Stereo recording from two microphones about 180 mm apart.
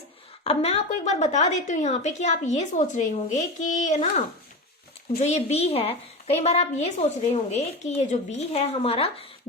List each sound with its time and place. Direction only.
0.4 s a woman's voice: 35° left (ahead or behind)
5.2 s a woman's voice: 40° left (ahead or behind)